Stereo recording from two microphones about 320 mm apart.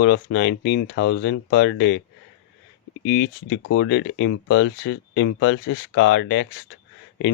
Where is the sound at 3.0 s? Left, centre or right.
Left.